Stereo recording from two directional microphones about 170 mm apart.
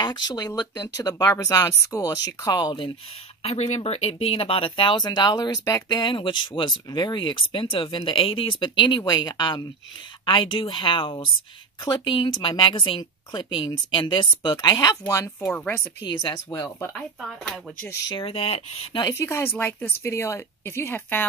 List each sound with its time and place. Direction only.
0.0 s speech: 25° left (ahead or behind)
3.4 s speech: 40° left (ahead or behind); by 15.3 s 20° left (ahead or behind)
15.4 s speech: 5° left (ahead or behind)
16.1 s speech: 25° left (ahead or behind)
16.9 s speech: centre (ahead or behind)
18.0 s speech: 30° left (ahead or behind)
18.9 s a woman's voice: 20° left (ahead or behind)